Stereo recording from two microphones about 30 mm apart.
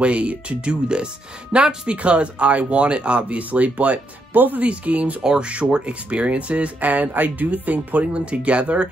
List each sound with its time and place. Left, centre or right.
0.0 s speech: right
0.8 s speech: right
4.4 s speech: right
4.8 s speech: right
5.4 s speech: right
8.1 s speech: right